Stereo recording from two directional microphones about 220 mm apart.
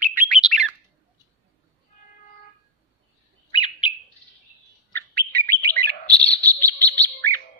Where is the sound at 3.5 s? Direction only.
20° left (ahead or behind).